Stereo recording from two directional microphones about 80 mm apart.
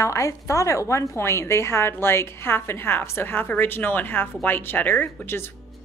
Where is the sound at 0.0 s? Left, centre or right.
Left.